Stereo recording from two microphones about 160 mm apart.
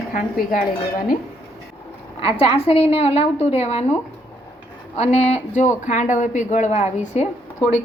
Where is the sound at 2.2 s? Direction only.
40° left (ahead or behind).